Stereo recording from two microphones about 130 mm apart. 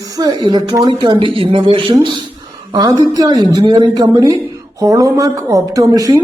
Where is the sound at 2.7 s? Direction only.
30° right (ahead or behind).